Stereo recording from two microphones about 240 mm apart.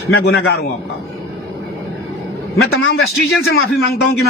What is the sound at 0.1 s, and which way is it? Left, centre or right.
Speech, left.